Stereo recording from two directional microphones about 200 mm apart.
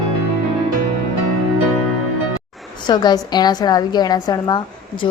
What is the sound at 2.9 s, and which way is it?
A woman's voice, 20° left (ahead or behind).